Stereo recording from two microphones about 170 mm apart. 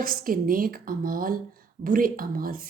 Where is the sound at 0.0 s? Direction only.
55° right (ahead or behind).